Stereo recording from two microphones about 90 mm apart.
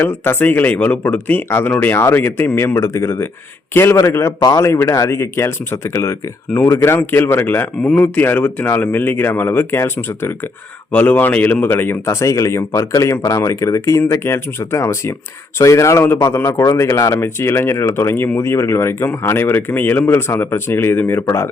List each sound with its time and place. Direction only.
0.0 s speech: 25° left (ahead or behind)
4.4 s speech: 40° left (ahead or behind); by 12.1 s 25° left (ahead or behind)
12.2 s speech: 35° left (ahead or behind)